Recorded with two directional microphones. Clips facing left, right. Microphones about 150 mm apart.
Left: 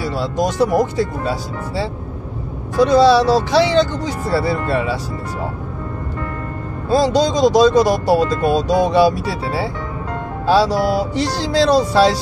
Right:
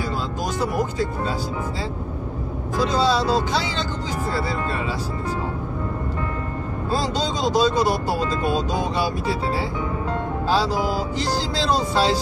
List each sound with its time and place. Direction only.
0.2 s speech: 80° left
2.9 s speech: 75° left (ahead or behind)
6.9 s speech: 75° left (ahead or behind)
10.4 s speech: 70° left (ahead or behind)